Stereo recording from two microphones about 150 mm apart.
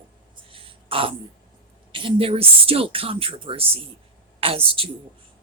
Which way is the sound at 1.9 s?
35° right (ahead or behind).